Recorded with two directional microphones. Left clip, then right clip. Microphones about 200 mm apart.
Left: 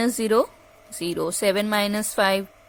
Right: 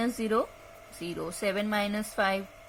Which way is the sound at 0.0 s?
50° left (ahead or behind).